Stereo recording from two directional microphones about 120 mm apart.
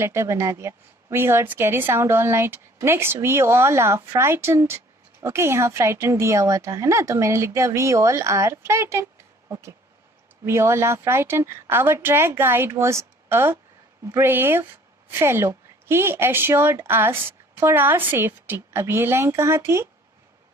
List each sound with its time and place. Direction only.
0.0 s a woman's voice: 25° right (ahead or behind)